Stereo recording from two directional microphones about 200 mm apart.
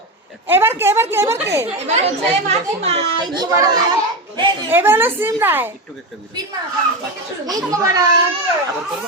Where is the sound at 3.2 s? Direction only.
20° right (ahead or behind).